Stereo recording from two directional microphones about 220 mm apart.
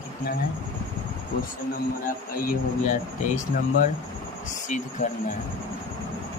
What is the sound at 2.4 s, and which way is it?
Speech, 40° left (ahead or behind).